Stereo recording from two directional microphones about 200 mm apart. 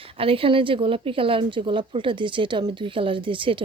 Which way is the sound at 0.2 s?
25° right (ahead or behind).